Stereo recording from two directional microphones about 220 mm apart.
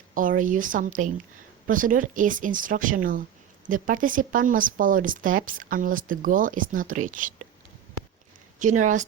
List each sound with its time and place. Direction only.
0.1 s speech: 35° right (ahead or behind)
8.5 s speech: 35° right (ahead or behind)